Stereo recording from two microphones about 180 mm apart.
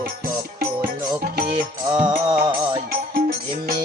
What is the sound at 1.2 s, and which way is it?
Music, 55° right (ahead or behind).